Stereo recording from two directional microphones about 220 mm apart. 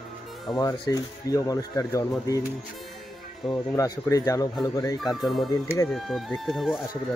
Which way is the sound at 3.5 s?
15° left (ahead or behind).